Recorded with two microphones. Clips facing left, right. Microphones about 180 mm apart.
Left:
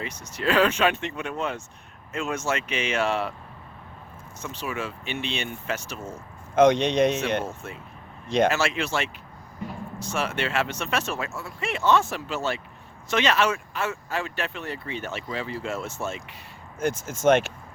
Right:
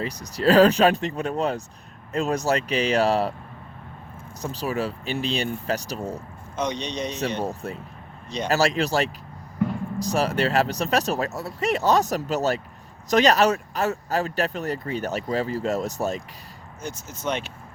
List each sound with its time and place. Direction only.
0.0 s speech: 35° right (ahead or behind)
4.4 s speech: 35° right (ahead or behind)
6.6 s speech: 90° left
6.9 s speech: 55° left (ahead or behind)
7.2 s speech: 35° right (ahead or behind)
17.2 s speech: 90° left